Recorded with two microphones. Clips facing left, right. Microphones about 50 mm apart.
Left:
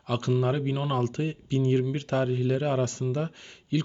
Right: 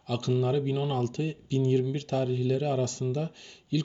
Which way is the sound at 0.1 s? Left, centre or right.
Left.